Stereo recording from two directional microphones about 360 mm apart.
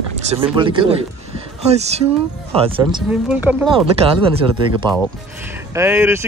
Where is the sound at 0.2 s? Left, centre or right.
Centre.